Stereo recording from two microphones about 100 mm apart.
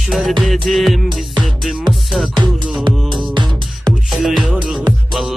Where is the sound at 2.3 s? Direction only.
50° right (ahead or behind).